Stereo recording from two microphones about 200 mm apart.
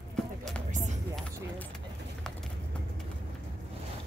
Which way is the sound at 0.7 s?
35° right (ahead or behind).